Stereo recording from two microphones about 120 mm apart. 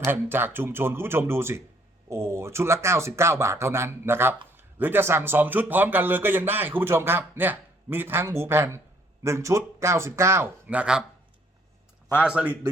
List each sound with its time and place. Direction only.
0.0 s speech: 20° right (ahead or behind)
12.2 s speech: 10° right (ahead or behind)